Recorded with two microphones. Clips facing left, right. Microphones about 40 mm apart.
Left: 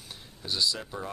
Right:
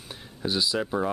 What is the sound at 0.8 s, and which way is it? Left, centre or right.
Speech, right.